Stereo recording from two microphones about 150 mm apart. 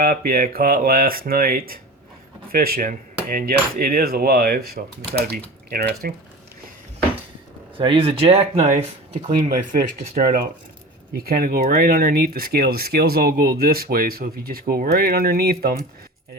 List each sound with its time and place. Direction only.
0.0 s speech: 70° right (ahead or behind); by 6.1 s 90° right
7.8 s speech: 35° right (ahead or behind)
9.4 s speech: 70° right (ahead or behind)
11.2 s speech: 80° right